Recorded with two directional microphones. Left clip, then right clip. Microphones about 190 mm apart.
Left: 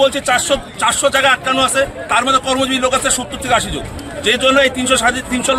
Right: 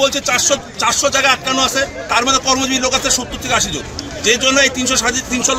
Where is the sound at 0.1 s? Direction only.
30° left (ahead or behind).